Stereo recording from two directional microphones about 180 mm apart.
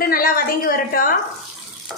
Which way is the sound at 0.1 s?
55° left (ahead or behind).